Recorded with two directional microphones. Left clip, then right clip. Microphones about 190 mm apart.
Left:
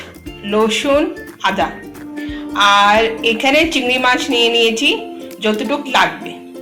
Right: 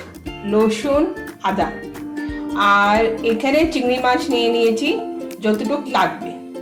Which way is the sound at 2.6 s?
5° right (ahead or behind).